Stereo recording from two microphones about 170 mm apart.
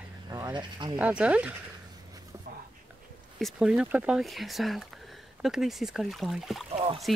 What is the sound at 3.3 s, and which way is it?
Speech, centre (ahead or behind).